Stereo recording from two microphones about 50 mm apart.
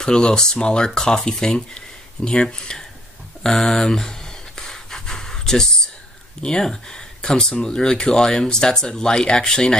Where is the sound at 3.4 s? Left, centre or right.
Centre.